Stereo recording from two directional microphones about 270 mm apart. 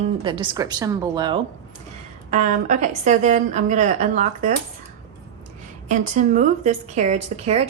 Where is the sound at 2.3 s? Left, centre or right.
Right.